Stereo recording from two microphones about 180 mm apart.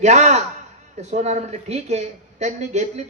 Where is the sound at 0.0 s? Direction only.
40° right (ahead or behind).